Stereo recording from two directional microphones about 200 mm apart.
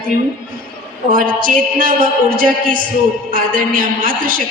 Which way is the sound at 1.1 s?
45° right (ahead or behind).